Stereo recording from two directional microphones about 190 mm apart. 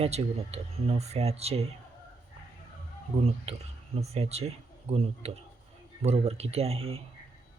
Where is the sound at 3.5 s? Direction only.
35° right (ahead or behind).